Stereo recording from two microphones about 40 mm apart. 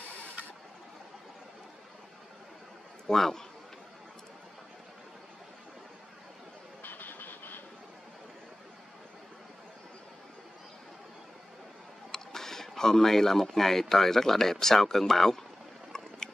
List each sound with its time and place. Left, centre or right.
3.1 s a man's voice: centre
6.8 s vehicle: left
12.1 s speech: centre
15.9 s boat: centre